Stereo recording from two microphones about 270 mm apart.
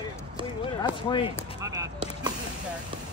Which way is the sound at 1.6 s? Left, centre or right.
Centre.